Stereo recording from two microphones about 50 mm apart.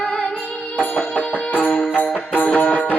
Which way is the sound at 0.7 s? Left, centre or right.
Left.